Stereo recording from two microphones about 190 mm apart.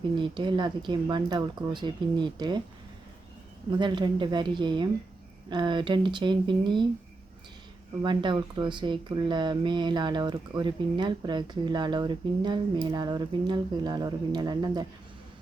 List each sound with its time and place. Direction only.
0.2 s speech: 25° right (ahead or behind)
3.7 s speech: 25° right (ahead or behind)
8.0 s speech: 25° right (ahead or behind)